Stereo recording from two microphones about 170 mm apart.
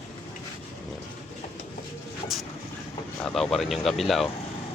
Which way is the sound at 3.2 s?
5° left (ahead or behind).